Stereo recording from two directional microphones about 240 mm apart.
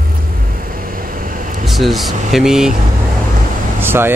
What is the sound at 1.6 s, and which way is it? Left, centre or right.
Speech, centre.